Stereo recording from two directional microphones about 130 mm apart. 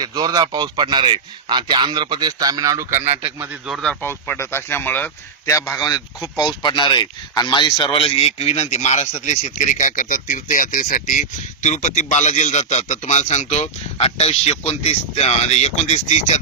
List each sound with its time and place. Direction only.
0.0 s a man's voice: 30° right (ahead or behind); by 3.6 s 15° right (ahead or behind)
3.7 s speech: 5° left (ahead or behind)
4.0 s speech: 15° left (ahead or behind)
5.5 s a man's voice: 25° left (ahead or behind)
6.6 s speech: 35° left (ahead or behind)
7.9 s speech: 50° left (ahead or behind)